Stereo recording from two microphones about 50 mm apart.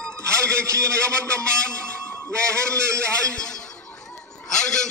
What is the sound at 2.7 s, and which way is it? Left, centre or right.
Speech, right.